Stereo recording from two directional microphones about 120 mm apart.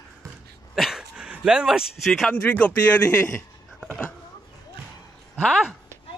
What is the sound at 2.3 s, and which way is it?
Speech, 10° left (ahead or behind).